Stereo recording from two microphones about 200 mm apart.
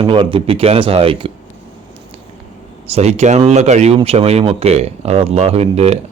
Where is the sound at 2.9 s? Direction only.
35° right (ahead or behind).